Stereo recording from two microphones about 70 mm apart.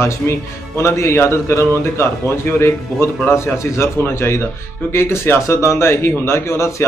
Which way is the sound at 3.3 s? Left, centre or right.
Left.